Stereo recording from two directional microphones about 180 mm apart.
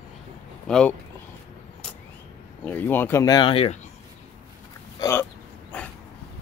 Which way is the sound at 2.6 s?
10° left (ahead or behind).